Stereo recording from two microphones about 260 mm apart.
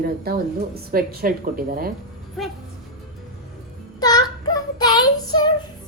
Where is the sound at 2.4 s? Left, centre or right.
Centre.